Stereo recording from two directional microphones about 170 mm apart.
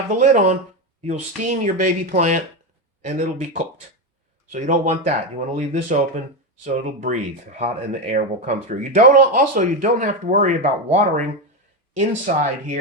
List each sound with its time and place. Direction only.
0.1 s speech: 50° right (ahead or behind)